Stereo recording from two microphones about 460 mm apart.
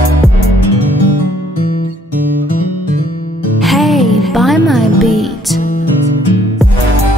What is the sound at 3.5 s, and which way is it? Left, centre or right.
Music, centre.